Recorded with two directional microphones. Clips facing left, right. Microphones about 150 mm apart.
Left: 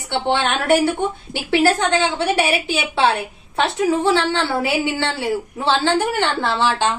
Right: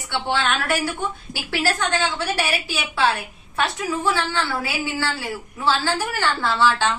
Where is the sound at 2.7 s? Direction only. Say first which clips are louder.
Left 4 dB; 25° left (ahead or behind).